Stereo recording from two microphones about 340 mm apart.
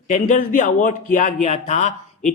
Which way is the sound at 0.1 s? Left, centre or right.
Left.